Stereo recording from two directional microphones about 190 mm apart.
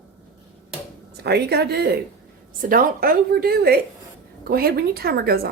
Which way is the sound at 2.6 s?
45° right (ahead or behind).